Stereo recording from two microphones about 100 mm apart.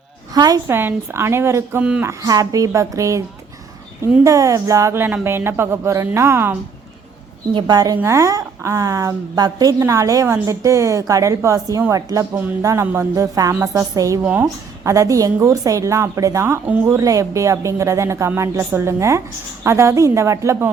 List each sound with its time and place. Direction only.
0.3 s a woman's voice: 40° right (ahead or behind)
0.7 s a woman's voice: 20° right (ahead or behind)
2.2 s a woman's voice: 35° right (ahead or behind)
4.9 s a woman's voice: 20° right (ahead or behind)
7.5 s a woman's voice: 40° right (ahead or behind)
7.9 s a woman's voice: 30° right (ahead or behind)